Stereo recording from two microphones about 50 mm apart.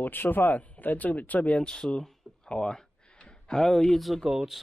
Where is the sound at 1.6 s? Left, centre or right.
Centre.